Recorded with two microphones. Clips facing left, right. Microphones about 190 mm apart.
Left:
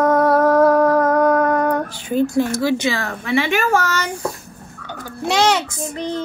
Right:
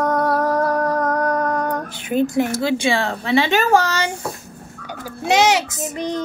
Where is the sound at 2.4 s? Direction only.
25° right (ahead or behind).